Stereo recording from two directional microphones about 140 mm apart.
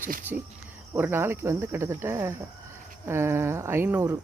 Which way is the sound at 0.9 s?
15° right (ahead or behind).